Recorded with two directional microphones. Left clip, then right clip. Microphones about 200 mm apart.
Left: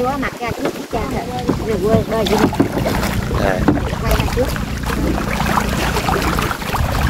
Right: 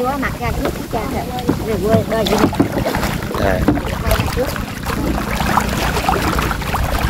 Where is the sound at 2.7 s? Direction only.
15° left (ahead or behind).